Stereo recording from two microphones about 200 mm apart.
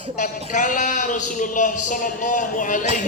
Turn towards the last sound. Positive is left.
turn(degrees=40)  # may be behind; listen again after turning